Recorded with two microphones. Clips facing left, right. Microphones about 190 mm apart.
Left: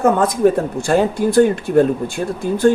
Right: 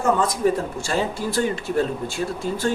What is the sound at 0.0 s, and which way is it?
Speech, 60° left (ahead or behind).